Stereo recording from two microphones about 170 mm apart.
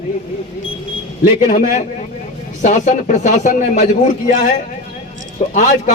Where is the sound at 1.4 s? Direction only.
45° left (ahead or behind).